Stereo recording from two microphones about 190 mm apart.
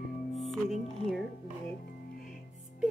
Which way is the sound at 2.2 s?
Centre (ahead or behind).